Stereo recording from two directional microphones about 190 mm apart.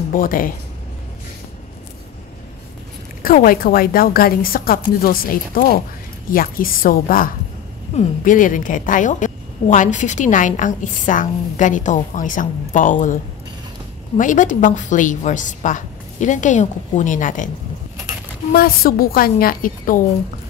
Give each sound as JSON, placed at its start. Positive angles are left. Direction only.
{"t": 0.1, "sound": "a woman's voice", "side_deg": 45}
{"t": 3.2, "sound": "a woman's voice", "side_deg": 50}
{"t": 18.5, "sound": "a woman's voice", "side_deg": 50}